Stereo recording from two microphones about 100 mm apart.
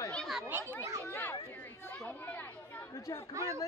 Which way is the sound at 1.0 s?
15° left (ahead or behind).